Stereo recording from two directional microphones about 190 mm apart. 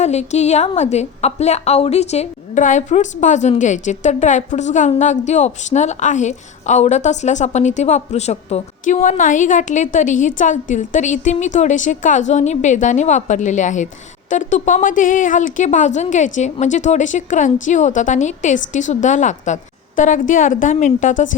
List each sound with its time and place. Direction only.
0.0 s a woman's voice: 35° left (ahead or behind)